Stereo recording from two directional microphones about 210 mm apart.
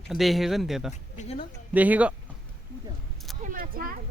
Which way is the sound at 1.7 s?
5° right (ahead or behind).